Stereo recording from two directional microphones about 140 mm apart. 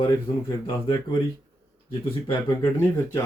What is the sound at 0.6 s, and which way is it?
Speech, 35° left (ahead or behind).